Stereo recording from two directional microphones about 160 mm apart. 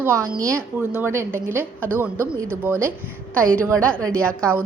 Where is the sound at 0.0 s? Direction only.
15° right (ahead or behind).